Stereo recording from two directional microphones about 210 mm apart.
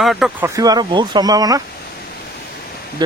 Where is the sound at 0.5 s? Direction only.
15° right (ahead or behind).